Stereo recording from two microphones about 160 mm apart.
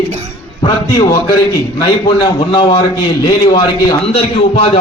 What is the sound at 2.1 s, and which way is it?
A man's voice, 35° left (ahead or behind).